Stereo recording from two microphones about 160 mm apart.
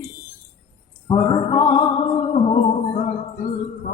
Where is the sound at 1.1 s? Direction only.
25° left (ahead or behind).